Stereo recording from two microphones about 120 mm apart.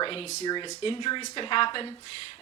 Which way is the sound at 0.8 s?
50° left (ahead or behind).